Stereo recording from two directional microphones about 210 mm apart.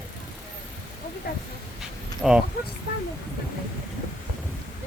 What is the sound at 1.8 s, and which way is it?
Dog, 5° right (ahead or behind).